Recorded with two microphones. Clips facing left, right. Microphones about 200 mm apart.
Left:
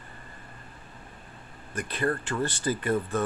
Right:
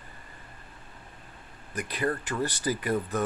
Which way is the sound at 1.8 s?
10° right (ahead or behind).